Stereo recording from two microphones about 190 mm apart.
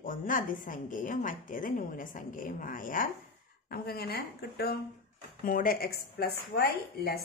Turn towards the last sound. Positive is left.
turn(degrees=55)  # may be behind; listen again after turning